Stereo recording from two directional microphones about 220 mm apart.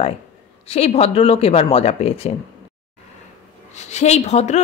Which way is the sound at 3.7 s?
30° left (ahead or behind).